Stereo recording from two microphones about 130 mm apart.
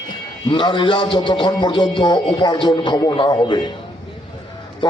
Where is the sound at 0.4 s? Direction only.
35° left (ahead or behind).